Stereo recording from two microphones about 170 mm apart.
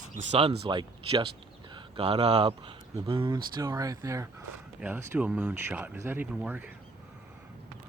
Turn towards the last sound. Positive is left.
turn(degrees=-10)  # may be behind; listen again after turning